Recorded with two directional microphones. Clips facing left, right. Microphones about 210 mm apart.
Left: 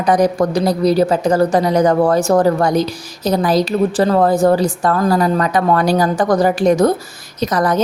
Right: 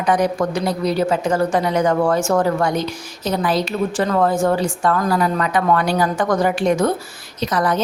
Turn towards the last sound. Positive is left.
turn(degrees=40)  # may be behind; listen again after turning